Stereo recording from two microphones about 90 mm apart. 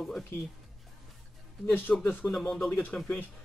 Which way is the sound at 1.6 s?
15° left (ahead or behind).